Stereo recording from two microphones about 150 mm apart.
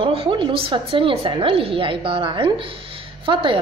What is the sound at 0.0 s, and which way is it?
A woman's voice, 35° right (ahead or behind).